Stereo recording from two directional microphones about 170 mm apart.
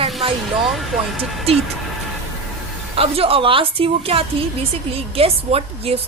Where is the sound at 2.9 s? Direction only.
35° right (ahead or behind).